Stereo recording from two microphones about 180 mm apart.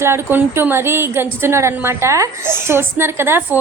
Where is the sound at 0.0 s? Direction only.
15° right (ahead or behind).